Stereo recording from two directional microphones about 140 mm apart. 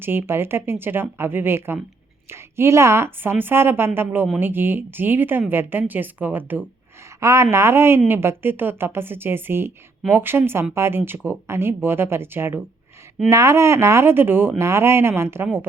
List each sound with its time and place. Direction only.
0.0 s speech: 15° right (ahead or behind)